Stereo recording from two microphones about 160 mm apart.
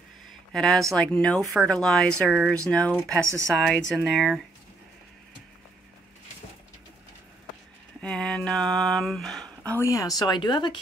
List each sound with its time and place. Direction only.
0.5 s speech: 5° left (ahead or behind)
2.3 s speech: 10° right (ahead or behind)
2.7 s speech: 10° left (ahead or behind)
8.0 s speech: 5° left (ahead or behind)
9.7 s speech: 20° left (ahead or behind)